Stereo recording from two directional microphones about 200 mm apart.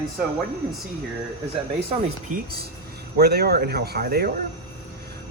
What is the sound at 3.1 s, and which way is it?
A man's voice, 50° right (ahead or behind).